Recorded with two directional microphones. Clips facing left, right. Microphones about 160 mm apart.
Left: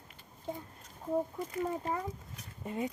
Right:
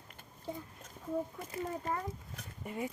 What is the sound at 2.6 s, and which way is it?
Speech, 25° left (ahead or behind).